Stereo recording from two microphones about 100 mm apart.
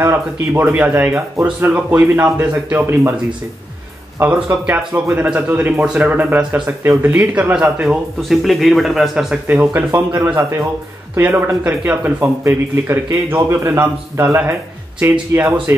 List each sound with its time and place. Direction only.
0.0 s a man's voice: 20° right (ahead or behind)
4.2 s a man's voice: 15° right (ahead or behind)
7.8 s speech: 5° right (ahead or behind)
9.5 s a man's voice: 20° right (ahead or behind)